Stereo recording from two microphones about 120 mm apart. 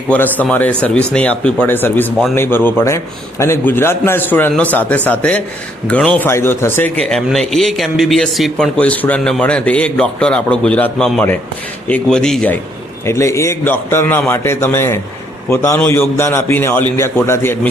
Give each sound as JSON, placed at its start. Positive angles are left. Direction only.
{"t": 0.1, "sound": "a man's voice", "side_deg": 15}
{"t": 7.0, "sound": "a man's voice", "side_deg": 5}
{"t": 13.1, "sound": "a man's voice", "side_deg": 25}